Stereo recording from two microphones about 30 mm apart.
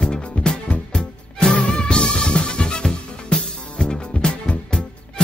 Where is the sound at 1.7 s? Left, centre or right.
Left.